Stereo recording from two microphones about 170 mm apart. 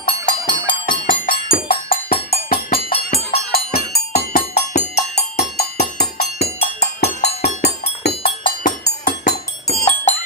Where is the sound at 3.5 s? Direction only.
65° left (ahead or behind).